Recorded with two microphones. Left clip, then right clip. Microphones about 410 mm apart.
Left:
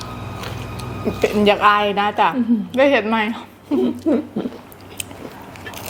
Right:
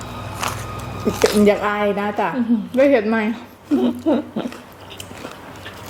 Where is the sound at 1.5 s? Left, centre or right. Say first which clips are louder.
Left 3 dB; left.